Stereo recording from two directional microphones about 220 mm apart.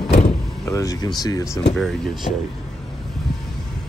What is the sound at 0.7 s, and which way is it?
Speech, 15° left (ahead or behind).